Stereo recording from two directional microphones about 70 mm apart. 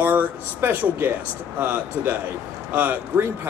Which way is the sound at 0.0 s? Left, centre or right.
Right.